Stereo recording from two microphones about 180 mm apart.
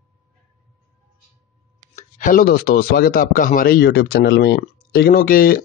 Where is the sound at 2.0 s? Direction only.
45° left (ahead or behind).